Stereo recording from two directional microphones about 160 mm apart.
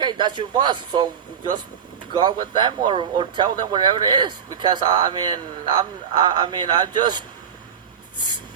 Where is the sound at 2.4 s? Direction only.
25° right (ahead or behind).